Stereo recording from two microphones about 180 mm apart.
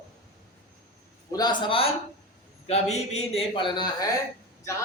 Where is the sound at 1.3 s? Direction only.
25° left (ahead or behind).